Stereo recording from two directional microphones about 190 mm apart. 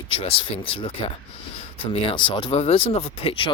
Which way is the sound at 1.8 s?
25° left (ahead or behind).